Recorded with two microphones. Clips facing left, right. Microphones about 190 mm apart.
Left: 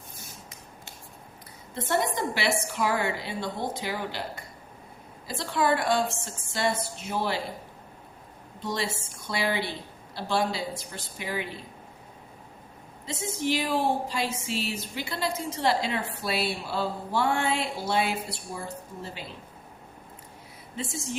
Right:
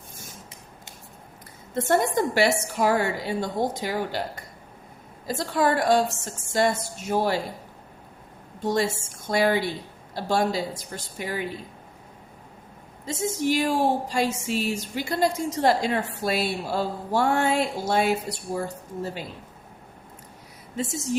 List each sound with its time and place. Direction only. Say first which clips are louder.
1.7 s speech: right 5 dB; 45° right (ahead or behind)
8.6 s speech: right 7 dB; 45° right (ahead or behind)
13.1 s speech: right 4 dB; 45° right (ahead or behind)
20.7 s speech: right 6 dB; 40° right (ahead or behind)